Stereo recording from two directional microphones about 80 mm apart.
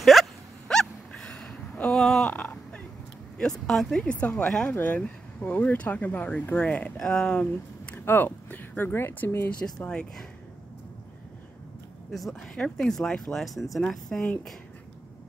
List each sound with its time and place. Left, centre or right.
0.0 s a sound: centre
2.2 s a sound: centre
3.3 s speech: centre; by 9.5 s left
9.8 s speech: centre
12.1 s speech: centre
12.5 s speech: centre